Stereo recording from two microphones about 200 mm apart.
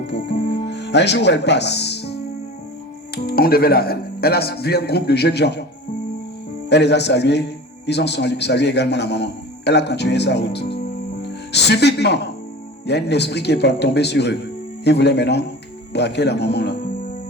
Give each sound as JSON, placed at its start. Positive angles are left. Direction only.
{"t": 0.1, "sound": "music", "side_deg": 60}
{"t": 3.2, "sound": "speech", "side_deg": 50}
{"t": 6.7, "sound": "a man's voice", "side_deg": 60}